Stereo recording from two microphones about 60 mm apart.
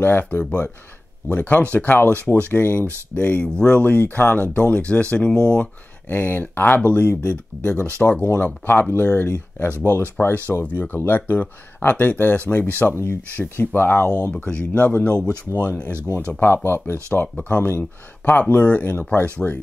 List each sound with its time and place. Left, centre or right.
0.0 s speech: left
3.4 s speech: centre
3.8 s speech: left
6.0 s speech: left
13.4 s speech: left
13.7 s speech: left
14.4 s speech: left
15.9 s speech: right
16.3 s speech: left